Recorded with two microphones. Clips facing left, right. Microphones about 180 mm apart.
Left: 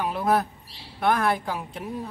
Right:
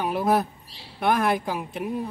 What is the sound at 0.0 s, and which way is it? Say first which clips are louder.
A woman's voice: right 1 dB; 20° right (ahead or behind).